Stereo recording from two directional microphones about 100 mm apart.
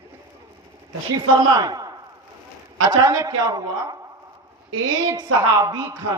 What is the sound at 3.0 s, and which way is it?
Speech, 35° right (ahead or behind).